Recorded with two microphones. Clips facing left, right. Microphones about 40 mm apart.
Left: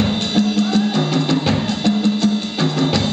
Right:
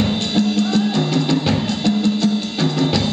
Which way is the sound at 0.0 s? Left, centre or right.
Centre.